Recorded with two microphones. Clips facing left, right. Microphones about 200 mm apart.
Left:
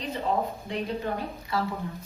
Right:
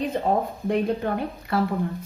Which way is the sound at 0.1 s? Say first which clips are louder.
Right 4 dB; 50° right (ahead or behind).